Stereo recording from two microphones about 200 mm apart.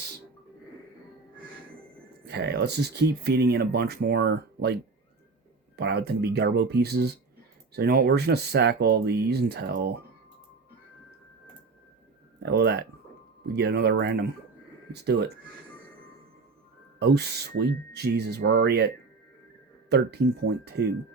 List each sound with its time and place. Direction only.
2.2 s speech: 55° right (ahead or behind)
12.4 s speech: 55° right (ahead or behind)
17.0 s speech: 55° right (ahead or behind)
19.9 s speech: 55° right (ahead or behind)